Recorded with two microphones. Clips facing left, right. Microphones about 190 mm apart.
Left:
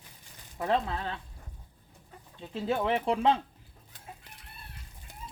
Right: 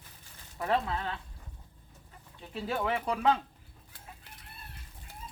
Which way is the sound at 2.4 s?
25° left (ahead or behind).